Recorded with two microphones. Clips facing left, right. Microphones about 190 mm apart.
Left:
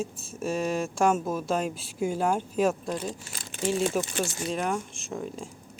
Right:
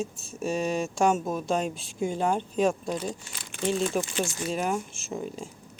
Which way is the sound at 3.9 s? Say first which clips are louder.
Even; centre (ahead or behind).